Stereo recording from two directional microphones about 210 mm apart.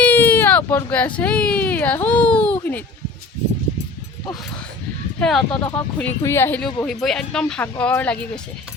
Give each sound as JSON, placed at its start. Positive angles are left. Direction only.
{"t": 0.0, "sound": "speech", "side_deg": 10}
{"t": 5.2, "sound": "speech", "side_deg": 0}